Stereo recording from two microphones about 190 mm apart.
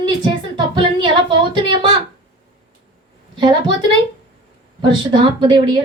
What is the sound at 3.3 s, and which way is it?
A woman's voice, 25° right (ahead or behind).